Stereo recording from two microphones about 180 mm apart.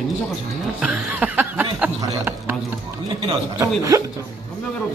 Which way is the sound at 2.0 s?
15° right (ahead or behind).